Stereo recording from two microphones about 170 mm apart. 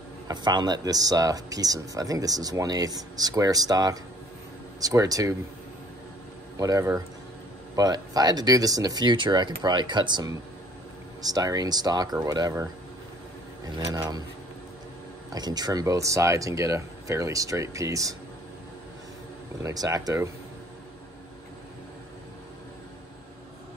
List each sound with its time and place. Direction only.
0.3 s speech: 25° right (ahead or behind)
6.5 s speech: 20° right (ahead or behind)
13.9 s speech: 20° right (ahead or behind)
15.3 s speech: 25° right (ahead or behind)
19.6 s speech: 20° right (ahead or behind)